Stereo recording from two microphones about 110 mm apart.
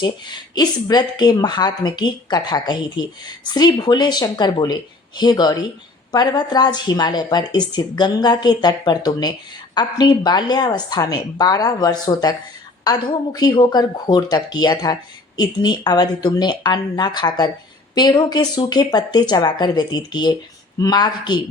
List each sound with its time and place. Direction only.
0.0 s a woman's voice: 40° left (ahead or behind)